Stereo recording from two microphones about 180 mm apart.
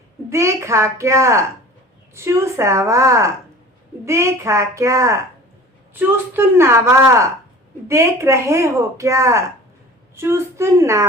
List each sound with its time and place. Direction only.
0.3 s speech: 15° right (ahead or behind)